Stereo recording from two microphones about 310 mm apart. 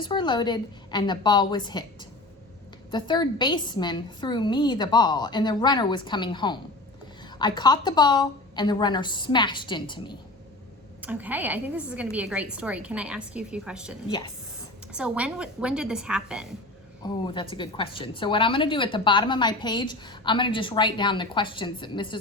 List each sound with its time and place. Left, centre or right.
0.0 s a woman's voice: centre
11.0 s a woman's voice: centre
14.9 s a woman's voice: centre
17.3 s a woman's voice: centre